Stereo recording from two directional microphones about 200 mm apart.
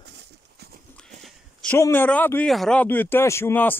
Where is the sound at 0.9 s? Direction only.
5° left (ahead or behind).